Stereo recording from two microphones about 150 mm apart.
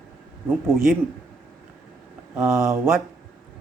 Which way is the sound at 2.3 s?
20° right (ahead or behind).